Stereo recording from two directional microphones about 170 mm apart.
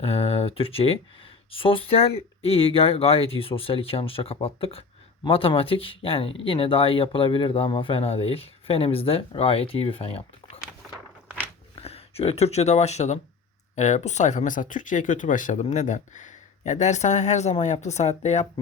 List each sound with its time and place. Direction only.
0.0 s speech: 35° left (ahead or behind)
11.8 s speech: 35° left (ahead or behind)